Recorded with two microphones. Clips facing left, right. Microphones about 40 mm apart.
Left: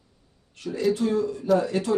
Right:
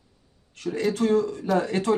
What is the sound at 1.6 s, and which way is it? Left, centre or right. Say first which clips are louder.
Speech: right 1 dB; right.